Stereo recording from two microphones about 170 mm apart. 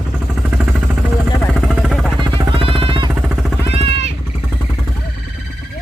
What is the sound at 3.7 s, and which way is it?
Vehicle, 40° right (ahead or behind).